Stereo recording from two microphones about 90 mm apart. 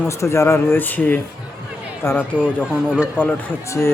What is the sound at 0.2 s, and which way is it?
Speech, 30° left (ahead or behind).